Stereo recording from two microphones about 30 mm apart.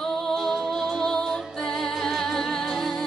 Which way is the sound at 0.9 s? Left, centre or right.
Left.